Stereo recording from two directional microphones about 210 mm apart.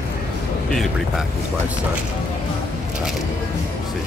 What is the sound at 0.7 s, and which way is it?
Speech, centre (ahead or behind).